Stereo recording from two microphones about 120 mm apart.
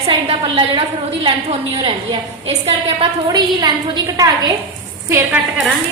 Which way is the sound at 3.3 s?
35° right (ahead or behind).